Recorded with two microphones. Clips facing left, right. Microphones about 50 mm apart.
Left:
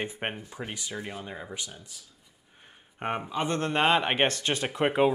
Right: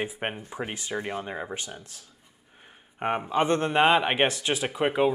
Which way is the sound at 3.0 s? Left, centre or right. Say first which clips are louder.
Right 3 dB; centre.